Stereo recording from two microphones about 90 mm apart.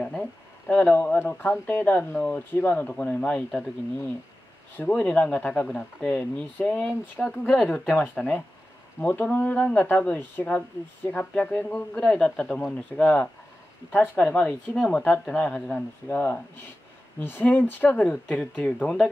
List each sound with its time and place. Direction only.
0.2 s speech: 20° left (ahead or behind)
4.7 s speech: 15° left (ahead or behind)